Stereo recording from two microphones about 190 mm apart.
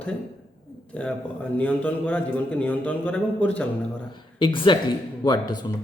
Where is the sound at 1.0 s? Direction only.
5° left (ahead or behind).